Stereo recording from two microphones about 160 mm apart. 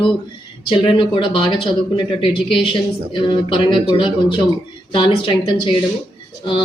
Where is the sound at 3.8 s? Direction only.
35° left (ahead or behind).